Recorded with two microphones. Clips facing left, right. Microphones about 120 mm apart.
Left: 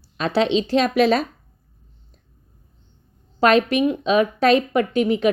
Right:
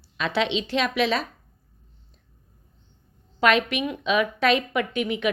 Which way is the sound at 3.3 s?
40° left (ahead or behind).